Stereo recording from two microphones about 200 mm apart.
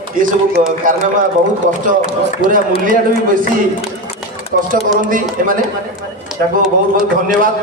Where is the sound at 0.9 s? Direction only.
40° right (ahead or behind).